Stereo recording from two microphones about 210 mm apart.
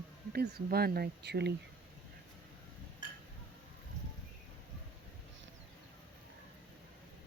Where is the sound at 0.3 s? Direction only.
50° right (ahead or behind).